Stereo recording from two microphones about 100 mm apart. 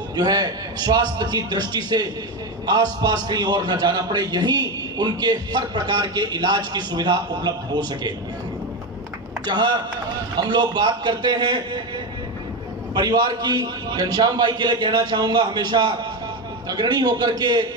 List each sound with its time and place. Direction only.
0.1 s a man's voice: 40° right (ahead or behind)
9.5 s a man's voice: 45° right (ahead or behind)
12.9 s a man's voice: 45° right (ahead or behind)